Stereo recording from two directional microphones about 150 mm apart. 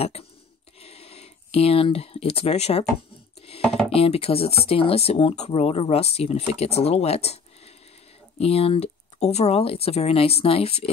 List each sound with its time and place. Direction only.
0.0 s speech: 45° left (ahead or behind)
0.7 s a sound: 40° left (ahead or behind)
3.9 s speech: 40° left (ahead or behind)